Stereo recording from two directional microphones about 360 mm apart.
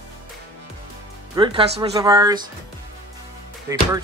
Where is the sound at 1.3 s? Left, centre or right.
Centre.